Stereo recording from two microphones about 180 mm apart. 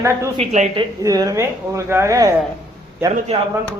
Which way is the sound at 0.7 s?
20° right (ahead or behind).